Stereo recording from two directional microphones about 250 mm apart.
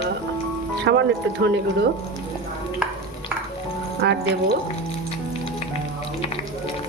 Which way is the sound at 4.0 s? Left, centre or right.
Right.